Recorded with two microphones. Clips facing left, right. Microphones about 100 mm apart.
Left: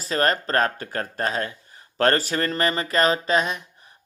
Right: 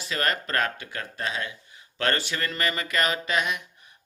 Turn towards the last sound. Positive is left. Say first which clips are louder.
# left 5 dB
turn(degrees=35)  # may be behind; listen again after turning